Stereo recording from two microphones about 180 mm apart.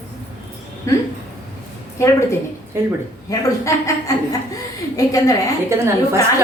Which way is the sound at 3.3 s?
20° left (ahead or behind).